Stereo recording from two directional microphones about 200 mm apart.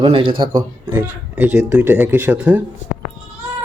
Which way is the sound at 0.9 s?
10° right (ahead or behind).